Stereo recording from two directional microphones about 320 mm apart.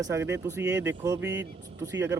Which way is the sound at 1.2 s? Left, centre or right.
Right.